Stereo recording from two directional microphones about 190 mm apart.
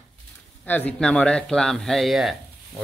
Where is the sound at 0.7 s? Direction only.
10° left (ahead or behind).